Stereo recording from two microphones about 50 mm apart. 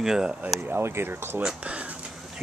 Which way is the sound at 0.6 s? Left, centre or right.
Right.